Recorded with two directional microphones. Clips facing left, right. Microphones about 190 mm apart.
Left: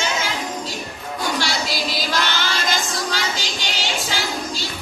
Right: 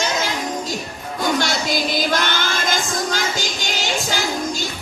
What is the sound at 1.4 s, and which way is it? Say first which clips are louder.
Music: right 3 dB; 50° right (ahead or behind).